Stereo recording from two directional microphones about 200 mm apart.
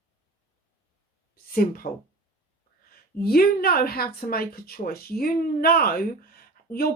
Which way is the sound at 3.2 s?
50° left (ahead or behind).